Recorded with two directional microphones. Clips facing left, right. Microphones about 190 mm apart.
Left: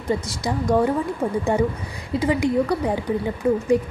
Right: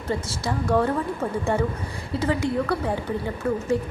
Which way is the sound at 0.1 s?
15° left (ahead or behind).